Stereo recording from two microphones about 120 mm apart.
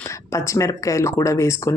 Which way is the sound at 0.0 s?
25° left (ahead or behind).